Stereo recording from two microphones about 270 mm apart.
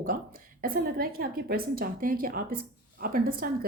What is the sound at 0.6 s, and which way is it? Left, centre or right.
A woman's voice, right.